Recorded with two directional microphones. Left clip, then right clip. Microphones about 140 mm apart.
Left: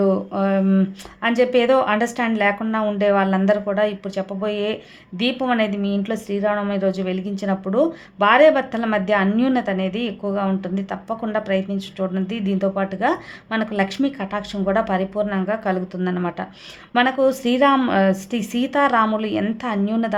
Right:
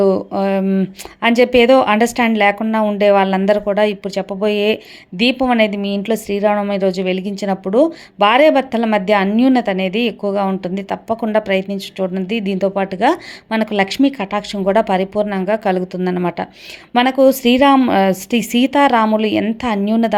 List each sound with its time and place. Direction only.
0.0 s speech: 35° right (ahead or behind)
2.6 s speech: 25° right (ahead or behind)